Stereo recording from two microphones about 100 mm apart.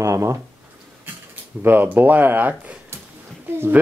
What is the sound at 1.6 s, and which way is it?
Speech, 20° right (ahead or behind).